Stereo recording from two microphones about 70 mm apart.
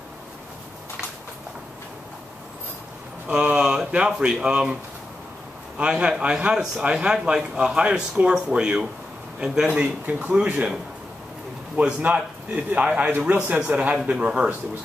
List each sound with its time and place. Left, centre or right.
3.3 s speech: centre
5.8 s a man's voice: centre
11.7 s a man's voice: centre